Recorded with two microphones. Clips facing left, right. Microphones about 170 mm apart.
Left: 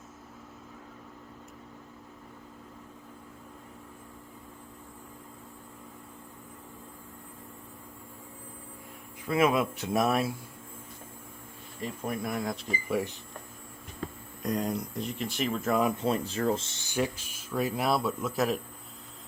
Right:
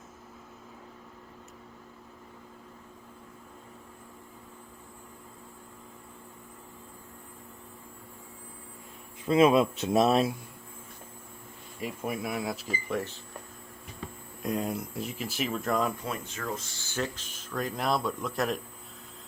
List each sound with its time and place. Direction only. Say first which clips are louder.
9.2 s speech: right 4 dB; 20° right (ahead or behind)
11.8 s speech: even; 10° right (ahead or behind)
12.9 s speech: left 3 dB; 10° left (ahead or behind)
14.4 s speech: left 1 dB; 5° right (ahead or behind)
16.0 s speech: left 8 dB; 30° left (ahead or behind); by 18.6 s centre (ahead or behind)